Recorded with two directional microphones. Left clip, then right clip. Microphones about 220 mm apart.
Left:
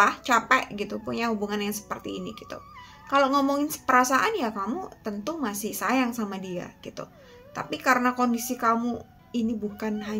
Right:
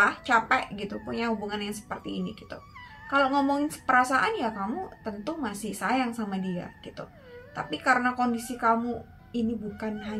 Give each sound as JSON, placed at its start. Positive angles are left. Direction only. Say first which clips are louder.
{"t": 0.0, "sound": "a woman's voice", "louder": "left 1 dB", "side_deg": 45}